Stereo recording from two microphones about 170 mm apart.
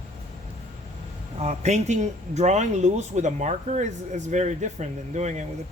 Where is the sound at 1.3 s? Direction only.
40° right (ahead or behind).